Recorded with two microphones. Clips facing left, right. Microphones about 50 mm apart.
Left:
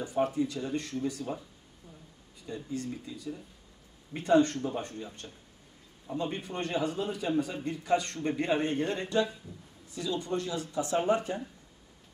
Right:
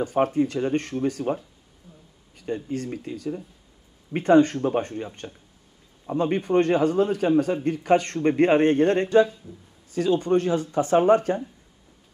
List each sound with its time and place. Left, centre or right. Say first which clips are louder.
0.0 s speech: right 7 dB; right